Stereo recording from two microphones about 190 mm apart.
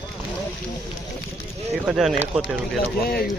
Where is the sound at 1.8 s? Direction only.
Centre (ahead or behind).